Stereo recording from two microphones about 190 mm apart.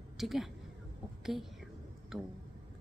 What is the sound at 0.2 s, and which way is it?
Speech, centre (ahead or behind).